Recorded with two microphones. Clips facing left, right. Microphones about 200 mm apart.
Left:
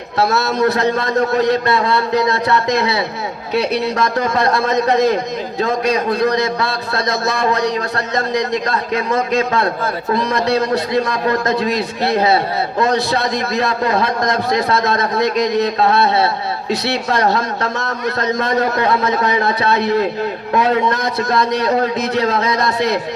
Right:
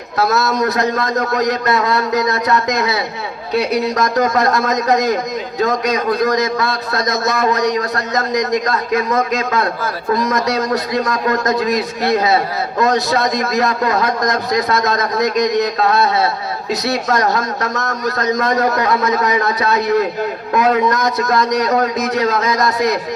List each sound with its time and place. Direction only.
0.2 s a man's voice: 30° left (ahead or behind)